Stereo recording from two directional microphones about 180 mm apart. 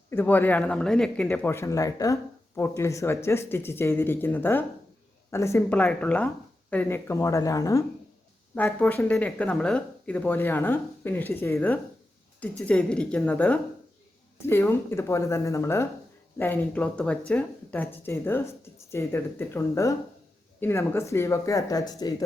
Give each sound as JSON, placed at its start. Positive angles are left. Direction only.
{"t": 0.1, "sound": "speech", "side_deg": 10}